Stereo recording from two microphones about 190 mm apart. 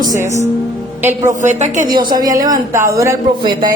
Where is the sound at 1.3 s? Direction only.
40° right (ahead or behind).